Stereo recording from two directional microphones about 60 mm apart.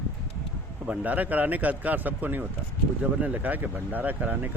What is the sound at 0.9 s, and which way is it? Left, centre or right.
Speech, right.